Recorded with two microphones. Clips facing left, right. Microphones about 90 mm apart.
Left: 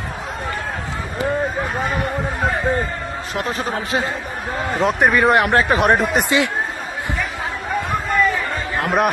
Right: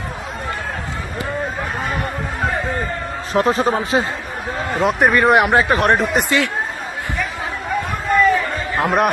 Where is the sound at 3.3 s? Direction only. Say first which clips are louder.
Right 8 dB; 35° right (ahead or behind).